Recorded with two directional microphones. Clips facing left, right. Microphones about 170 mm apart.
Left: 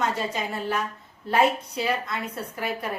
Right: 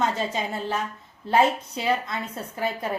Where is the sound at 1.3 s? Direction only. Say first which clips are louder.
Right 1 dB; 25° right (ahead or behind).